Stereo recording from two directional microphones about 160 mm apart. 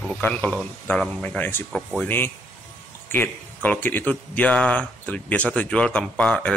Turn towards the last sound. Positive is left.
turn(degrees=10)  # may be behind; listen again after turning